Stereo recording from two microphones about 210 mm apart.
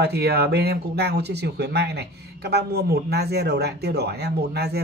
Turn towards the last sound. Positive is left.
turn(degrees=-50)  # may be behind; listen again after turning